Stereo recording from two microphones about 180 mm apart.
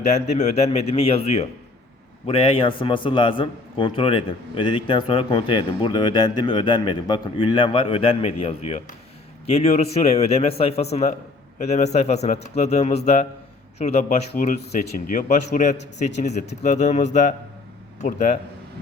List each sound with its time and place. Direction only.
0.0 s a man's voice: 40° left (ahead or behind)